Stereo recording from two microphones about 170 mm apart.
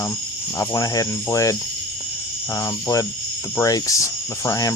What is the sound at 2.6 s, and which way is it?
Speech, 20° left (ahead or behind).